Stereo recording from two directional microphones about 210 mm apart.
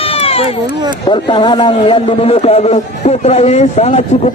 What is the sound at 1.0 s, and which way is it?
A man's voice, 20° left (ahead or behind).